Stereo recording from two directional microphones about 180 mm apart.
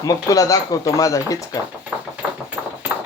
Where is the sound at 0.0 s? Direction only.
20° left (ahead or behind).